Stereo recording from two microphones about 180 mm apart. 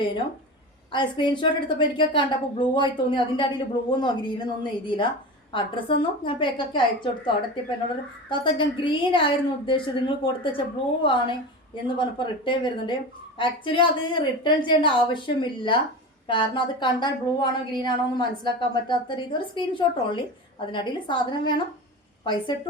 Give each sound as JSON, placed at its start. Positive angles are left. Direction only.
{"t": 0.9, "sound": "a woman's voice", "side_deg": 25}